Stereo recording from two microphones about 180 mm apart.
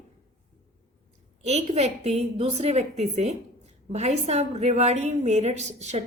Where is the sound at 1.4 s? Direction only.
40° right (ahead or behind).